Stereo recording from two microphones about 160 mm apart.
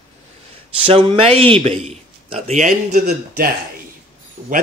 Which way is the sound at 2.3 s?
45° right (ahead or behind).